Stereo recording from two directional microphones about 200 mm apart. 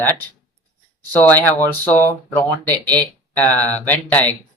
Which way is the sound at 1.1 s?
10° left (ahead or behind).